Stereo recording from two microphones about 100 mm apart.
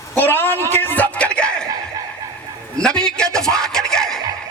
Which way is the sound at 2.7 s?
10° left (ahead or behind).